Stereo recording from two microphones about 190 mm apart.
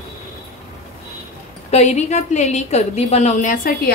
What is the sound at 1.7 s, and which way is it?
A woman's voice, 35° left (ahead or behind).